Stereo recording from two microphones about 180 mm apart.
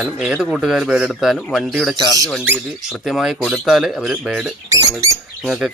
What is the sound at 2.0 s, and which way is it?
Speech, 20° right (ahead or behind).